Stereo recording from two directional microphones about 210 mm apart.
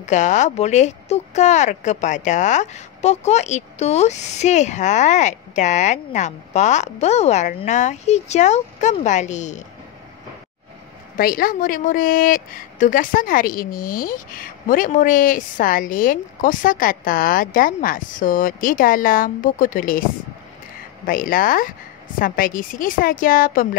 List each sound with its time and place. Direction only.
0.0 s speech: 35° left (ahead or behind)
11.1 s speech: 45° left (ahead or behind)
21.1 s speech: 40° left (ahead or behind)